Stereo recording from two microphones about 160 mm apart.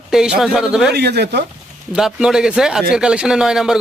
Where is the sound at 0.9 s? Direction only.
90° right.